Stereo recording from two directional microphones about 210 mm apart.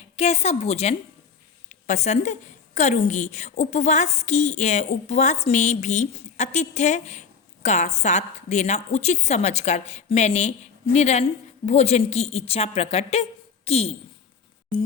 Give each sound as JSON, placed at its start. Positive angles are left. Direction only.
{"t": 0.2, "sound": "a woman's voice", "side_deg": 30}